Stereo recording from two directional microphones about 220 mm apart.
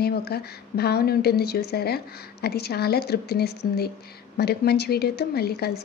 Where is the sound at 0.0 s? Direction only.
45° left (ahead or behind).